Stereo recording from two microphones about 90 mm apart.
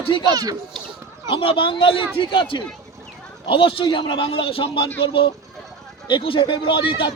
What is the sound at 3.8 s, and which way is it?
Speech, 65° left (ahead or behind).